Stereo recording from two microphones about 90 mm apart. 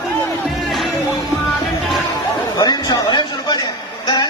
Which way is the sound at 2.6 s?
55° left (ahead or behind).